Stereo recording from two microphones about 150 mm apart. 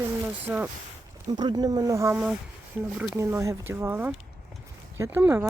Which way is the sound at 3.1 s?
20° right (ahead or behind).